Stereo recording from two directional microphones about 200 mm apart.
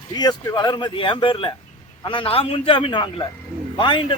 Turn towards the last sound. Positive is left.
turn(degrees=25)  # may be behind; listen again after turning